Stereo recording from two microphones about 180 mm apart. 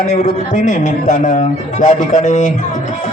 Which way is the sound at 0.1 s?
40° left (ahead or behind).